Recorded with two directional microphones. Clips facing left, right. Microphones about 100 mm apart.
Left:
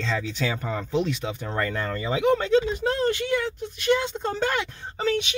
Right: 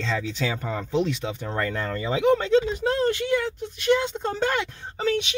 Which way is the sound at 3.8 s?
20° right (ahead or behind).